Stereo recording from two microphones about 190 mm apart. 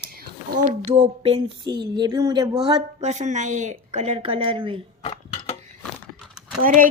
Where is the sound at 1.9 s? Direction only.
20° right (ahead or behind).